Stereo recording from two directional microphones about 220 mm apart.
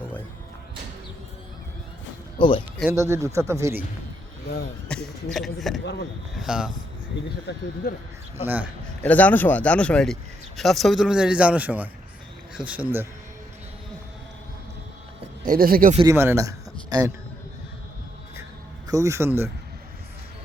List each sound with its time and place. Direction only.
2.4 s speech: 20° left (ahead or behind)
2.9 s speech: 15° right (ahead or behind)
4.9 s a man's voice: centre (ahead or behind)
5.8 s speech: 50° left (ahead or behind)
6.3 s speech: 5° right (ahead or behind)
7.5 s speech: 50° left (ahead or behind)
8.4 s speech: 5° right (ahead or behind)
9.0 s speech: 5° left (ahead or behind); by 13.1 s 10° right (ahead or behind)
15.4 s speech: 40° right (ahead or behind)
16.0 s speech: 15° right (ahead or behind)
18.9 s speech: 15° right (ahead or behind)